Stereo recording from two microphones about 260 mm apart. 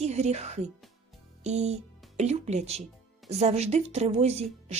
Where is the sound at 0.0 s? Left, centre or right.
Right.